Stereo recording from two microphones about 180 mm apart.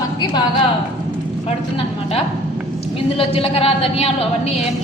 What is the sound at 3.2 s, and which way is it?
Speech, 30° left (ahead or behind).